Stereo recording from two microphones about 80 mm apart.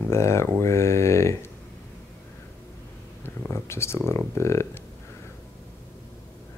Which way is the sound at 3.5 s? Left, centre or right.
Left.